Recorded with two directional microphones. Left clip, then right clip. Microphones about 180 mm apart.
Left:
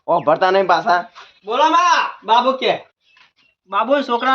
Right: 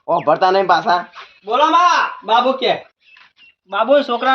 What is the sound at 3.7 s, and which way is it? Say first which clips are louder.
Speech: right 2 dB; centre (ahead or behind).